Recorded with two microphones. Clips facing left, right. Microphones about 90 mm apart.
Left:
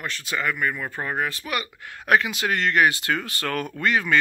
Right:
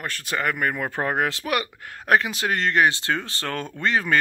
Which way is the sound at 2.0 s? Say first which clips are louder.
Even; 35° right (ahead or behind).